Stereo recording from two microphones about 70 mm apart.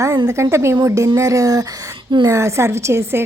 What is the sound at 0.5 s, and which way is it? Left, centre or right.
A woman's voice, right.